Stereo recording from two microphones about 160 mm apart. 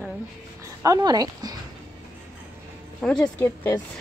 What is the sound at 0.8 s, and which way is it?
Speech, 25° right (ahead or behind).